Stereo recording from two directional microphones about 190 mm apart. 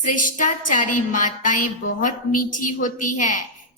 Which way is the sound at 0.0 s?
40° left (ahead or behind).